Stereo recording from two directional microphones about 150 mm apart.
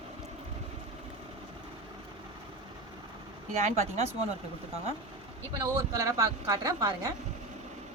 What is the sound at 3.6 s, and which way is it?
Speech, 50° right (ahead or behind).